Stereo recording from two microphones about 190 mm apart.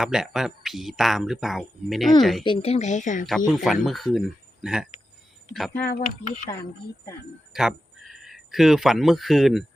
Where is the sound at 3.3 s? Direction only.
5° left (ahead or behind).